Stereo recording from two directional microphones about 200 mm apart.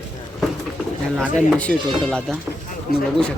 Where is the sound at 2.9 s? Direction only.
50° left (ahead or behind).